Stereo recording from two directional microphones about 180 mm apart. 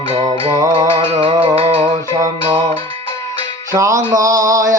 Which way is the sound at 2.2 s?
25° right (ahead or behind).